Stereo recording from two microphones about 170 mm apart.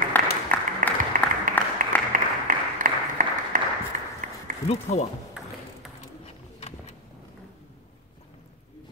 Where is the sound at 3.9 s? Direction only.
50° right (ahead or behind).